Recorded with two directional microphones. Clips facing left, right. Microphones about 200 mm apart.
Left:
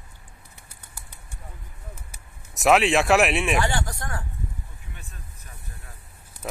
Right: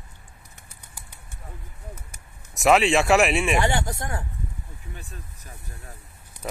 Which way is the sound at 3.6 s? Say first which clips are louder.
Right 2 dB; 20° right (ahead or behind).